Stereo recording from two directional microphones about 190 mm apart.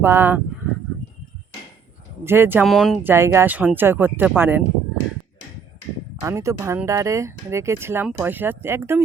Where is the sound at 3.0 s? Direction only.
10° right (ahead or behind).